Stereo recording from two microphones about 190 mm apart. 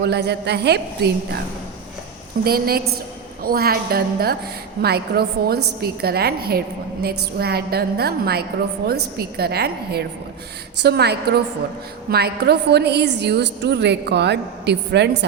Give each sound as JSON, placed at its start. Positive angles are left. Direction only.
{"t": 0.0, "sound": "a woman's voice", "side_deg": -60}
{"t": 2.4, "sound": "a woman's voice", "side_deg": -55}